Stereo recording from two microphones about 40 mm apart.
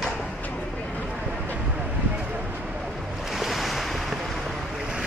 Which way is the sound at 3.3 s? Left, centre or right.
Centre.